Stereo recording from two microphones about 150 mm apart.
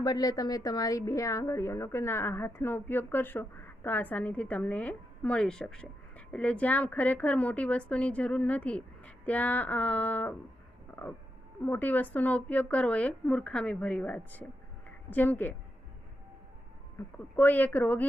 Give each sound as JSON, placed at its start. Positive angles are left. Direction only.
{"t": 0.0, "sound": "a woman's voice", "side_deg": 25}
{"t": 11.6, "sound": "a woman's voice", "side_deg": 10}
{"t": 17.0, "sound": "a woman's voice", "side_deg": 15}